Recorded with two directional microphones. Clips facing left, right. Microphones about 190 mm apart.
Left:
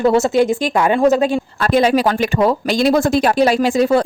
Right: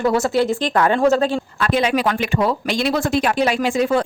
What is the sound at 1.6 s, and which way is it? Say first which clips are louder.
Speech: left 5 dB; 40° left (ahead or behind).